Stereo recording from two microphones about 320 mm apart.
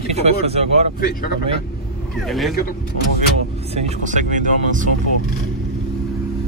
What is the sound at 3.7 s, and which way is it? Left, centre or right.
Speech, right.